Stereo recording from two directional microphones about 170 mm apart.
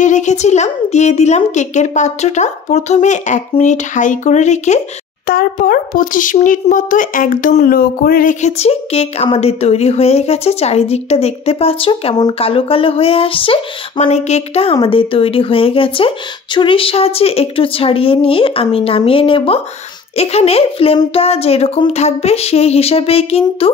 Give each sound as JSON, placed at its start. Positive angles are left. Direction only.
{"t": 0.0, "sound": "a woman's voice", "side_deg": 45}
{"t": 5.2, "sound": "speech", "side_deg": 60}